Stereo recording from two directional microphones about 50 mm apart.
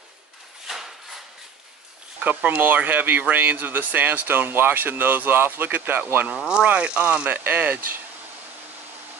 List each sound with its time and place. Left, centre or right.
0.7 s a sound: centre
2.1 s speech: right
6.3 s speech: centre
6.6 s speech: right